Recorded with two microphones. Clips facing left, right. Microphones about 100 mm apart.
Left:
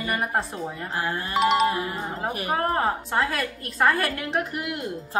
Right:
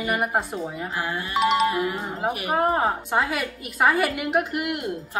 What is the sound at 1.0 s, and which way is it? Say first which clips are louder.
Speech: left 2 dB; 35° left (ahead or behind).